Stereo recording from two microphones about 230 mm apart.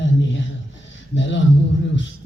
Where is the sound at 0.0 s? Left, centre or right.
Left.